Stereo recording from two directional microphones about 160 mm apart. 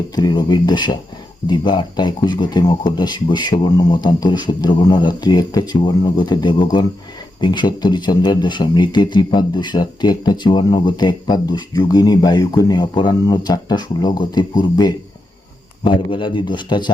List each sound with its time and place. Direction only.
0.2 s a man's voice: 25° left (ahead or behind)